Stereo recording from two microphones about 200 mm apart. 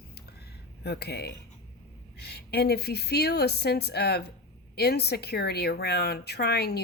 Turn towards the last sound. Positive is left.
turn(degrees=55)  # may be behind; listen again after turning